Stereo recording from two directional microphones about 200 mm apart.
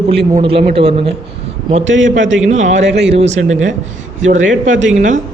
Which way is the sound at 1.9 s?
70° right (ahead or behind).